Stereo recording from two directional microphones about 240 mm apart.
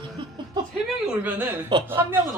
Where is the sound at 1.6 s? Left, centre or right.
Centre.